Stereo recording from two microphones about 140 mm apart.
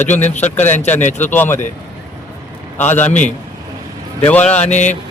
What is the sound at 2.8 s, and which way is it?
Speech, 15° left (ahead or behind).